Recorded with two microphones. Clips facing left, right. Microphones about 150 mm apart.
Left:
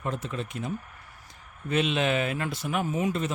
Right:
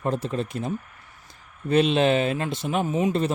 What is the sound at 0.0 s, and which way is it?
A man's voice, 35° right (ahead or behind).